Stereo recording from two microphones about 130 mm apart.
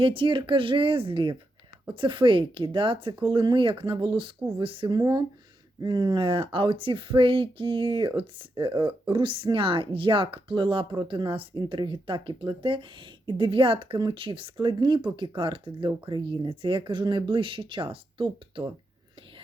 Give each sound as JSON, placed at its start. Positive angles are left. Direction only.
{"t": 0.0, "sound": "speech", "side_deg": -40}
{"t": 4.9, "sound": "speech", "side_deg": -30}